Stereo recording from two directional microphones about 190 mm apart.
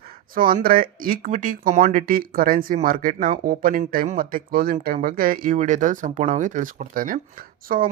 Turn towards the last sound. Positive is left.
turn(degrees=-45)  # may be behind; listen again after turning